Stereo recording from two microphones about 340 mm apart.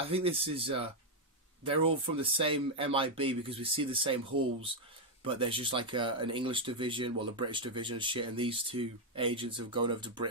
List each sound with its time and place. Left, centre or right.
0.0 s speech: centre
5.2 s speech: centre